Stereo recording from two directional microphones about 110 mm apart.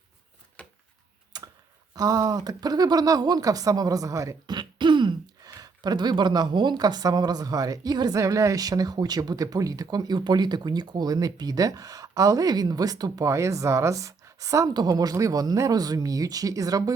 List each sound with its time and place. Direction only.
1.3 s typing: 40° right (ahead or behind)
2.0 s speech: 35° right (ahead or behind)